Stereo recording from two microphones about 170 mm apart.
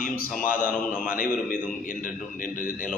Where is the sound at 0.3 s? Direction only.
55° left (ahead or behind).